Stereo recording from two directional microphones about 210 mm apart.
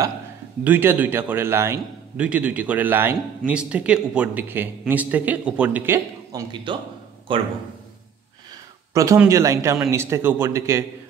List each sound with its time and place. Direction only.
0.7 s a man's voice: 10° right (ahead or behind)
6.5 s a man's voice: 20° right (ahead or behind)
8.9 s a man's voice: 15° right (ahead or behind)